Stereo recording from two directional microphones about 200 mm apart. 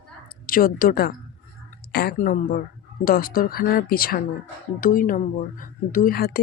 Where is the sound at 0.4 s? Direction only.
45° left (ahead or behind).